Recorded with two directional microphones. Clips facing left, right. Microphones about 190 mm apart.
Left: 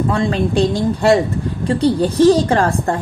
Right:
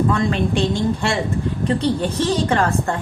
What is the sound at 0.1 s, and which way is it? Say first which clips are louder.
A woman's voice: left 2 dB; 35° left (ahead or behind).